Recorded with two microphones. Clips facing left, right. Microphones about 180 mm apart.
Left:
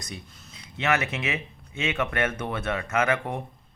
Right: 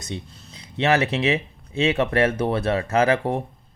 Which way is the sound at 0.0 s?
30° right (ahead or behind).